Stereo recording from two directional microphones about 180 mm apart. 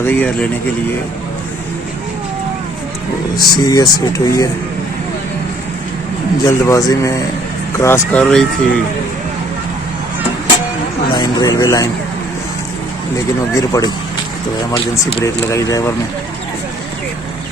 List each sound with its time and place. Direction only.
0.0 s speech: 10° left (ahead or behind)
3.5 s speech: 20° left (ahead or behind)
6.4 s speech: 20° left (ahead or behind)
11.1 s speech: 20° left (ahead or behind)
13.5 s speech: 20° left (ahead or behind)
15.2 s speech: 15° left (ahead or behind)